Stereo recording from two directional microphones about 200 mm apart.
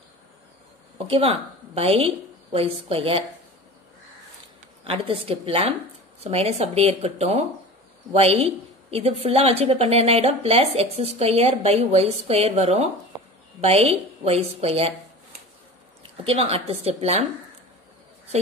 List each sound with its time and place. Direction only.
1.0 s a woman's voice: 30° right (ahead or behind)
4.8 s a woman's voice: 30° right (ahead or behind)
16.0 s a woman's voice: 30° right (ahead or behind)